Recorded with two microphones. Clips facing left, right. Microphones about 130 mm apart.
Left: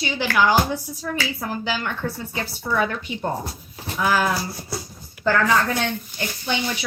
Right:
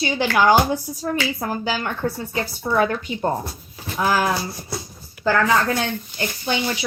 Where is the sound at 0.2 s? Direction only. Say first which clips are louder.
Right 3 dB; 45° right (ahead or behind).